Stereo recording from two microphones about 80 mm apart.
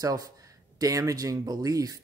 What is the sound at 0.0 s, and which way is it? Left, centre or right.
Speech, right.